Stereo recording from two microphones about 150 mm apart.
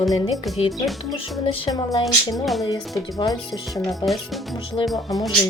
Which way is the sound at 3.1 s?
25° left (ahead or behind).